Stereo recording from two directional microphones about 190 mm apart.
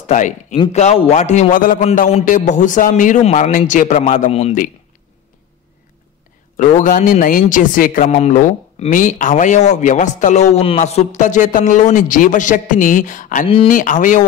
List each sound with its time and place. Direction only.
0.0 s speech: 40° left (ahead or behind)
6.5 s speech: 45° left (ahead or behind)